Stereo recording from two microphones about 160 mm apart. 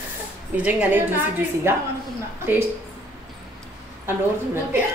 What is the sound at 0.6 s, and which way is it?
A woman's voice, 10° right (ahead or behind).